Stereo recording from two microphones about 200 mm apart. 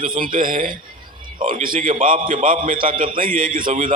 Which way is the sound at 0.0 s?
45° right (ahead or behind).